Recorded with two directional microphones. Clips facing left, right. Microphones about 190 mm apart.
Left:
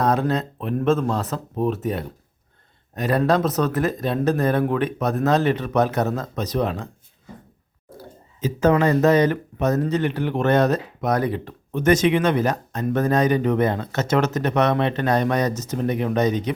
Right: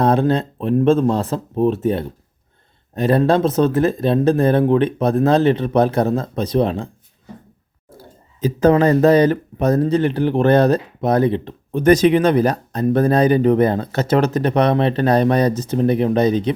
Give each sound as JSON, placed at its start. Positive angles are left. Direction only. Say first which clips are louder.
{"t": 0.0, "sound": "speech", "louder": "right 5 dB", "side_deg": -30}
{"t": 7.9, "sound": "speech", "louder": "left 1 dB", "side_deg": -30}